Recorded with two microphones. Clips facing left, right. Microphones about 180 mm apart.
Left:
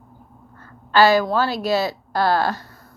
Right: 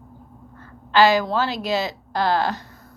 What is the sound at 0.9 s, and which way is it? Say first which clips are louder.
A woman's voice: left 1 dB; 20° right (ahead or behind).